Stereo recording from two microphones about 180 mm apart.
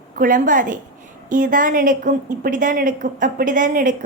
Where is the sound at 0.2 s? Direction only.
45° right (ahead or behind).